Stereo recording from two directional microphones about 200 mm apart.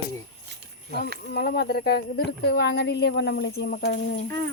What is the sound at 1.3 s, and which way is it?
Speech, 55° left (ahead or behind).